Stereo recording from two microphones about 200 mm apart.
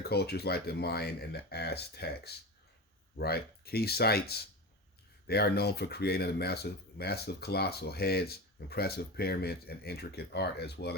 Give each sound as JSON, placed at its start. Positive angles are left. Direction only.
{"t": 0.0, "sound": "speech", "side_deg": 55}